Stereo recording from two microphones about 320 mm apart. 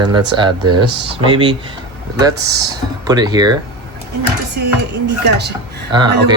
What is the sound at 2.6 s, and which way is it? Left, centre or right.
Speech, centre.